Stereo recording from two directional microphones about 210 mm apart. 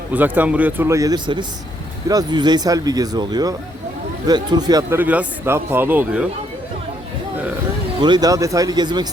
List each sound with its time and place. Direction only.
0.1 s speech: 10° right (ahead or behind)
8.0 s speech: 20° right (ahead or behind)